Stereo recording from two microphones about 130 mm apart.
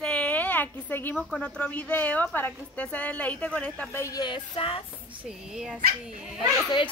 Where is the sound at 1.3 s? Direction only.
10° left (ahead or behind).